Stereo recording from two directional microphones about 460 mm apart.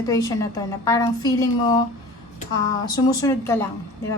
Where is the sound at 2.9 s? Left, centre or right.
Centre.